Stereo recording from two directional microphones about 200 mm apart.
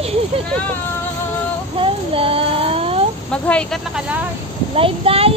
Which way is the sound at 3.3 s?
5° left (ahead or behind).